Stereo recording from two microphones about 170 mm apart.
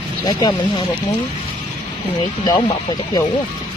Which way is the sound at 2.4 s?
25° left (ahead or behind).